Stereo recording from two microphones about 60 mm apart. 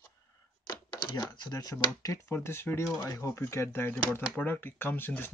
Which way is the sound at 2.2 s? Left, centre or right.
Left.